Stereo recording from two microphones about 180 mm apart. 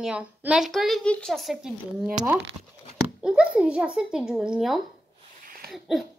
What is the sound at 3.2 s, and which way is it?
A child's voice, 5° right (ahead or behind).